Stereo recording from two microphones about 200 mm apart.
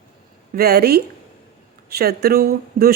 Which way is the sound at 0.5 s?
50° right (ahead or behind).